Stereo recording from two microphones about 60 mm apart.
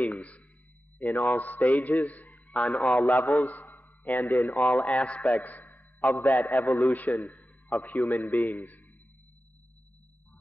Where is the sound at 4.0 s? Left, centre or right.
Left.